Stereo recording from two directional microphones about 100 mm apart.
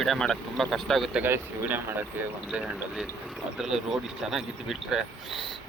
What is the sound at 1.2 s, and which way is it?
Speech, 20° right (ahead or behind).